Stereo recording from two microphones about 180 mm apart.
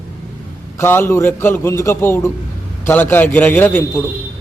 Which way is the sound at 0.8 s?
10° left (ahead or behind).